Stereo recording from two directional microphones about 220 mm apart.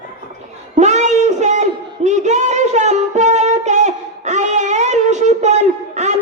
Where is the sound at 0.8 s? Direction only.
30° right (ahead or behind).